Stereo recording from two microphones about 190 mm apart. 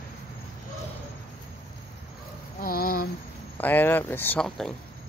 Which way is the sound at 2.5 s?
50° left (ahead or behind).